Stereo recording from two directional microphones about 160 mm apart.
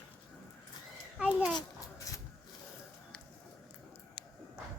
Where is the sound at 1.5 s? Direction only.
20° left (ahead or behind).